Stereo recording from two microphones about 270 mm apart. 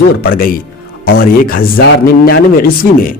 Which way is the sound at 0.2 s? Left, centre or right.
Left.